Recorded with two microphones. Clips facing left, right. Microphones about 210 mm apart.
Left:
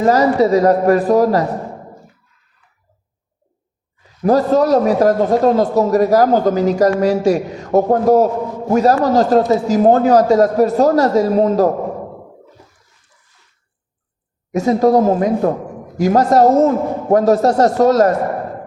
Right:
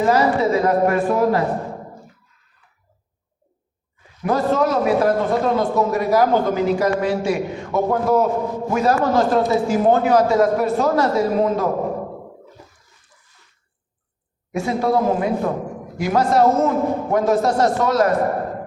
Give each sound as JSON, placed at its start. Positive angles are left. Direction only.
{"t": 0.0, "sound": "a man's voice", "side_deg": 40}
{"t": 4.2, "sound": "a man's voice", "side_deg": 35}
{"t": 14.5, "sound": "a man's voice", "side_deg": 40}